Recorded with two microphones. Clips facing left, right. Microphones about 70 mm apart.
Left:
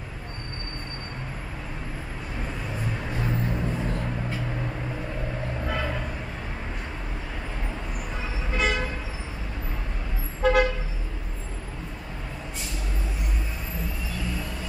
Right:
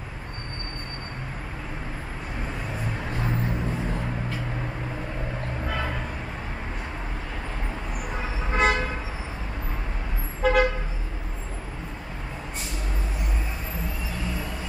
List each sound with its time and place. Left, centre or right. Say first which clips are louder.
2.7 s vehicle: left 1 dB; centre
5.7 s vehicle: even; centre
8.5 s vehicle: right 4 dB; right
10.4 s toot: left 1 dB; centre